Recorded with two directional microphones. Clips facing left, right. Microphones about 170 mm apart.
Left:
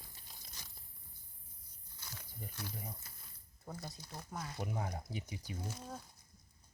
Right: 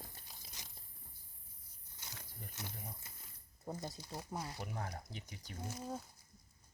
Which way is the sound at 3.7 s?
20° right (ahead or behind).